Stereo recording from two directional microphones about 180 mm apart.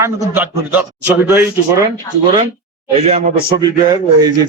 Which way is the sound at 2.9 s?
35° right (ahead or behind).